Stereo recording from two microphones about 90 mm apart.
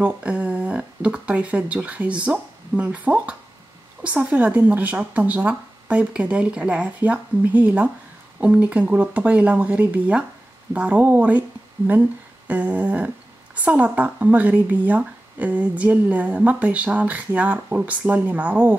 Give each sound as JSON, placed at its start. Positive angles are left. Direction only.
{"t": 0.0, "sound": "speech", "side_deg": -15}
{"t": 12.4, "sound": "a sound", "side_deg": -15}
{"t": 13.7, "sound": "speech", "side_deg": -15}